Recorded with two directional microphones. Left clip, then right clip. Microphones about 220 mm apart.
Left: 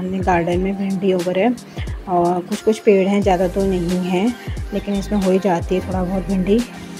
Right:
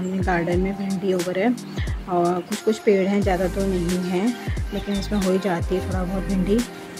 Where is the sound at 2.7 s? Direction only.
10° left (ahead or behind).